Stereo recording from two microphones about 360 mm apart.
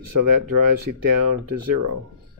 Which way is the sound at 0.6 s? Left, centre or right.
Right.